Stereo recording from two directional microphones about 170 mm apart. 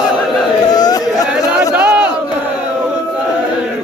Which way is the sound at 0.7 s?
25° left (ahead or behind).